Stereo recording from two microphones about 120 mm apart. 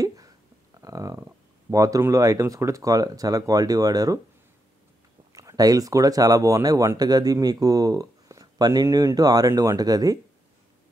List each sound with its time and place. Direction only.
0.7 s speech: 30° right (ahead or behind)
5.3 s speech: 30° right (ahead or behind)